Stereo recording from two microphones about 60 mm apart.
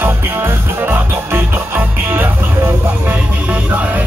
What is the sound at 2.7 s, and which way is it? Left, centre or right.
Vehicle, right.